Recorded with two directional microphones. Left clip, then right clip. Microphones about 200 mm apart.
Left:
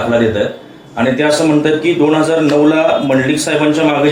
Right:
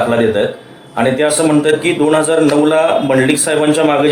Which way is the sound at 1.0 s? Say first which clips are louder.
Even; 55° right (ahead or behind).